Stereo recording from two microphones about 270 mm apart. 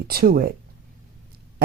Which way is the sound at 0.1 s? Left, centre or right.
Right.